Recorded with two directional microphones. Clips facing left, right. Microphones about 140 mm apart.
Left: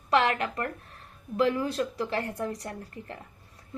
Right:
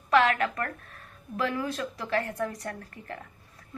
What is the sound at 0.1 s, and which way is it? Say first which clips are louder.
Speech: right 2 dB; 30° left (ahead or behind).